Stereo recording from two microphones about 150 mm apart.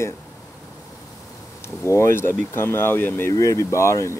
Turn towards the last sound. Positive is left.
turn(degrees=20)  # may be behind; listen again after turning